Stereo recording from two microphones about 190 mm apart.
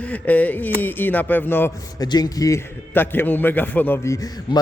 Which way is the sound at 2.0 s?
20° left (ahead or behind).